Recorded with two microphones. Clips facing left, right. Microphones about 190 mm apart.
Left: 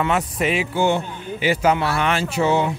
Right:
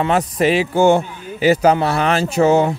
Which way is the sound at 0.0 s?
35° right (ahead or behind).